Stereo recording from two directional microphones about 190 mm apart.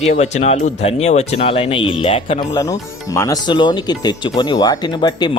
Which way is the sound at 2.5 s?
15° left (ahead or behind).